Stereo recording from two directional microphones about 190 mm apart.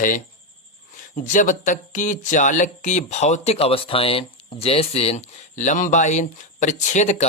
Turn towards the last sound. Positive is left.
turn(degrees=40)  # may be behind; listen again after turning